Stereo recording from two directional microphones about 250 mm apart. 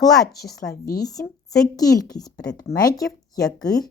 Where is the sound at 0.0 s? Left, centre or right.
Centre.